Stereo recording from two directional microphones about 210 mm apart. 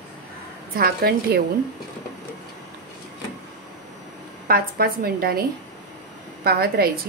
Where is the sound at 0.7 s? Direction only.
45° right (ahead or behind).